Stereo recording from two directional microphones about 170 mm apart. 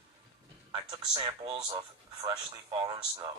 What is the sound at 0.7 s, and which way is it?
Speech, 25° right (ahead or behind).